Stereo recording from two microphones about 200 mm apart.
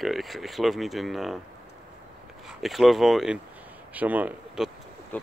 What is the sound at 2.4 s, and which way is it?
Speech, centre (ahead or behind).